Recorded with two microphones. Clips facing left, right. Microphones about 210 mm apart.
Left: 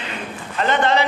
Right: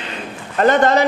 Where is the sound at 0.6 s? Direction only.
45° right (ahead or behind).